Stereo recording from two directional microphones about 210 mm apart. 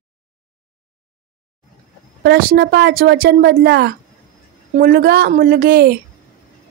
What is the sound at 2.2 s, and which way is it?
Speech, 50° right (ahead or behind).